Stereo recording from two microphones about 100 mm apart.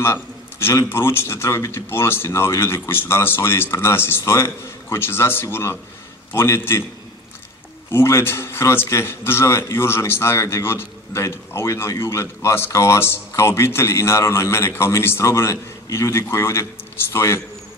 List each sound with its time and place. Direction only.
0.0 s a man's voice: 25° left (ahead or behind)
7.9 s a man's voice: 25° left (ahead or behind)